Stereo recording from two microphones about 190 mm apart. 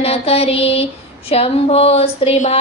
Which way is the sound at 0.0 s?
30° left (ahead or behind).